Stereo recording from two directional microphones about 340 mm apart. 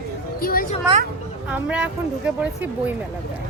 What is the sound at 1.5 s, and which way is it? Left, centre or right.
Speech, centre.